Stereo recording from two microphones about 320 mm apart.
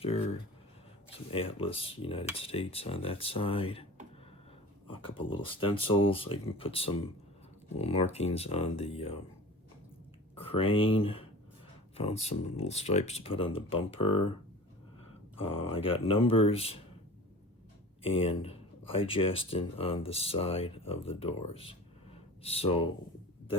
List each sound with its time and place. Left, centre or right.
0.0 s speech: centre
1.3 s speech: centre
4.9 s speech: centre
10.3 s speech: centre
15.4 s speech: centre
18.0 s speech: centre